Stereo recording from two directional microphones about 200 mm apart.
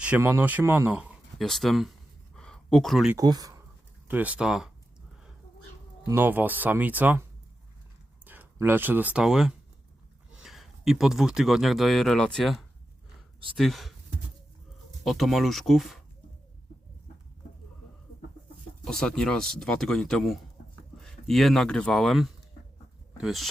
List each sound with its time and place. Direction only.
0.0 s speech: 10° right (ahead or behind)
3.2 s speech: 20° right (ahead or behind)
4.1 s speech: 5° right (ahead or behind)
6.1 s speech: 10° right (ahead or behind)
15.0 s speech: centre (ahead or behind)
18.9 s speech: 5° left (ahead or behind)